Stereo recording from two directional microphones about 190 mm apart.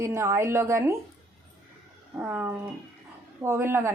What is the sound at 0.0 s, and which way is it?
Speech, 15° right (ahead or behind).